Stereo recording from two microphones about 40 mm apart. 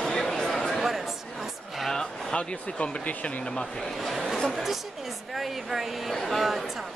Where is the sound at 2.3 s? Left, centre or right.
Left.